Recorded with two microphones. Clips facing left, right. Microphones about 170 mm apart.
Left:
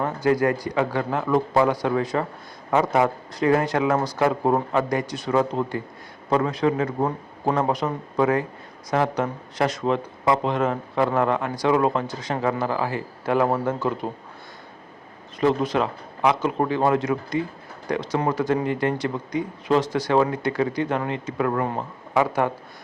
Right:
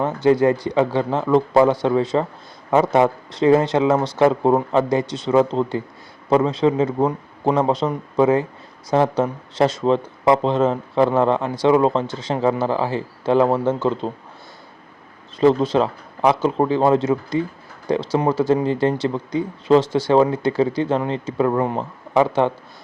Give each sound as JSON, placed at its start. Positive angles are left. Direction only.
{"t": 0.0, "sound": "speech", "side_deg": -25}
{"t": 15.4, "sound": "speech", "side_deg": -30}